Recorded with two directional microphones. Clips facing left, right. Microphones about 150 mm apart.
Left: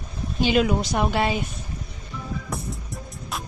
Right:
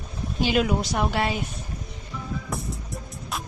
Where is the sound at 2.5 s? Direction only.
Centre (ahead or behind).